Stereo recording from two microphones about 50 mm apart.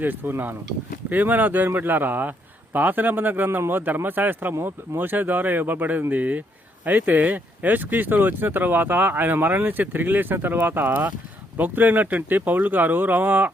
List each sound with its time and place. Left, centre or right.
0.0 s speech: right